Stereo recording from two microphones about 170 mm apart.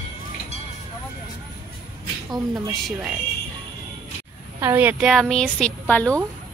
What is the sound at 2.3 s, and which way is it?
Speech, 20° right (ahead or behind).